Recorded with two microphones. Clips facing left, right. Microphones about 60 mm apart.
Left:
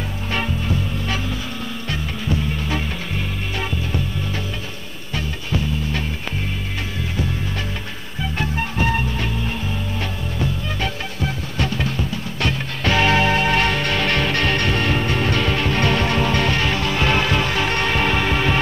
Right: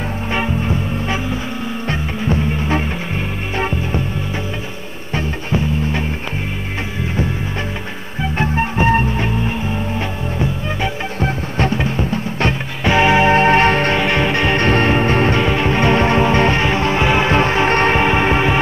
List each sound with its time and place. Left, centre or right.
0.3 s music: right
5.1 s music: right
8.2 s music: right
11.1 s music: right
12.8 s music: centre
13.9 s music: right